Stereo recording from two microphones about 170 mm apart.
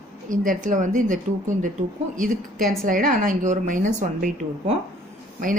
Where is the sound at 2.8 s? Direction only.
55° right (ahead or behind).